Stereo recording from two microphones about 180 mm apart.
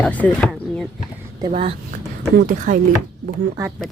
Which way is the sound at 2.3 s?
50° right (ahead or behind).